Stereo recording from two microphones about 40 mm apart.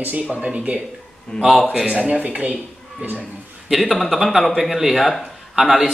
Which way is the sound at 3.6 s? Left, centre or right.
Centre.